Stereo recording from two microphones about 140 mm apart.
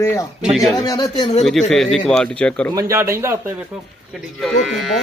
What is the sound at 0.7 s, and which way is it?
Speech, 30° left (ahead or behind).